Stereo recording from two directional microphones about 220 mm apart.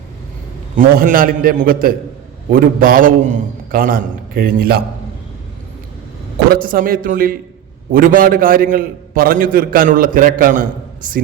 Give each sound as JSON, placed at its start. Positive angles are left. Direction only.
{"t": 0.9, "sound": "a man's voice", "side_deg": -40}
{"t": 6.5, "sound": "a man's voice", "side_deg": -40}